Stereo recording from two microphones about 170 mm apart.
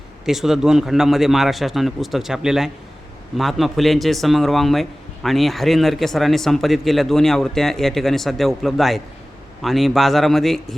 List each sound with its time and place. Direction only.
0.3 s a man's voice: centre (ahead or behind)